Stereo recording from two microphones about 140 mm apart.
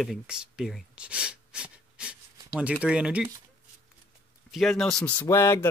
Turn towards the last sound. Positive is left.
turn(degrees=20)  # may be behind; listen again after turning